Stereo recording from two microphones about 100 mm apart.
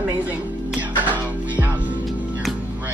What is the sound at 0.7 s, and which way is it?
Music, 15° right (ahead or behind).